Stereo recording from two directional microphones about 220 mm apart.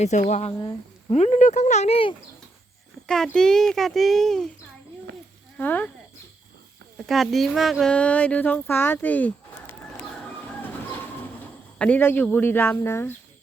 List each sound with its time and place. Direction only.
0.0 s speech: 30° left (ahead or behind)
3.1 s speech: 5° left (ahead or behind)
5.5 s speech: 10° left (ahead or behind)
6.9 s speech: centre (ahead or behind)
11.8 s speech: 10° left (ahead or behind)